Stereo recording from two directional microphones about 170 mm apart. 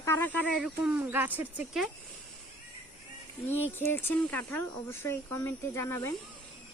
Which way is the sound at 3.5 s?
10° left (ahead or behind).